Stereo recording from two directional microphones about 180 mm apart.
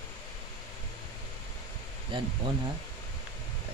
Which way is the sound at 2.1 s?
25° right (ahead or behind).